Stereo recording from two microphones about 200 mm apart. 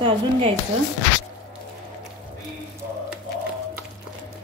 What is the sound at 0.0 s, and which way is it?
Speech, 25° right (ahead or behind).